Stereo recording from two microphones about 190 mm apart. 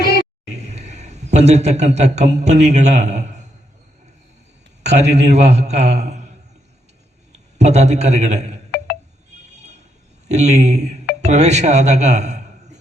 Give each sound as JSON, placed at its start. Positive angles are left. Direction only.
{"t": 0.0, "sound": "music", "side_deg": 60}
{"t": 0.4, "sound": "speech", "side_deg": -35}
{"t": 4.8, "sound": "a man's voice", "side_deg": -35}
{"t": 7.6, "sound": "a man's voice", "side_deg": -35}
{"t": 10.2, "sound": "a man's voice", "side_deg": -35}